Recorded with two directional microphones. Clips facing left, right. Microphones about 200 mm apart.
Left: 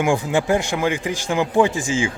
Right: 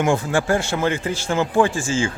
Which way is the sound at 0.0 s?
15° left (ahead or behind).